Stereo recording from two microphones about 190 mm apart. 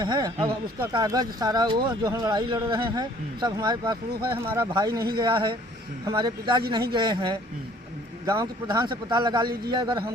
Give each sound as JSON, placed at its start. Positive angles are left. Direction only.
{"t": 0.0, "sound": "speech", "side_deg": -20}